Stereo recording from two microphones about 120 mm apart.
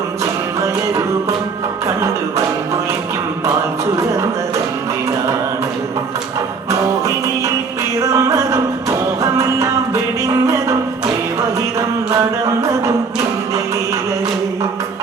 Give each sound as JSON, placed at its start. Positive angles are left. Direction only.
{"t": 6.7, "sound": "music", "side_deg": -25}
{"t": 12.5, "sound": "music", "side_deg": -25}